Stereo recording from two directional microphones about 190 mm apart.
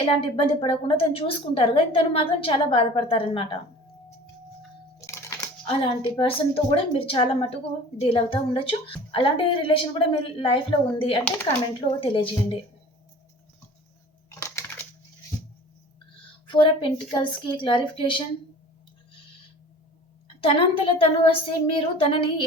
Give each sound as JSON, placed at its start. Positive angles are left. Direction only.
{"t": 0.0, "sound": "a woman's voice", "side_deg": 30}
{"t": 4.9, "sound": "a sound", "side_deg": 15}
{"t": 5.6, "sound": "a woman's voice", "side_deg": 25}
{"t": 16.5, "sound": "a woman's voice", "side_deg": 25}
{"t": 20.2, "sound": "a woman's voice", "side_deg": 30}